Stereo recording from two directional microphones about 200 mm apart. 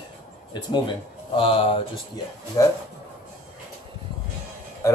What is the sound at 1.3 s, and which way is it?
Speech, 25° left (ahead or behind).